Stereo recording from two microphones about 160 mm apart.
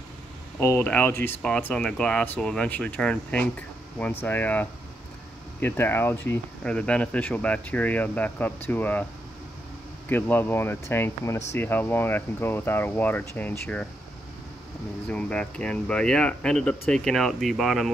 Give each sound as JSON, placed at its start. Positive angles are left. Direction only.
{"t": 0.6, "sound": "speech", "side_deg": 15}
{"t": 10.0, "sound": "speech", "side_deg": 10}
{"t": 15.0, "sound": "speech", "side_deg": 5}